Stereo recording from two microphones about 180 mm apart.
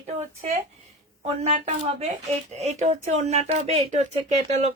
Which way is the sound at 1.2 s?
35° right (ahead or behind).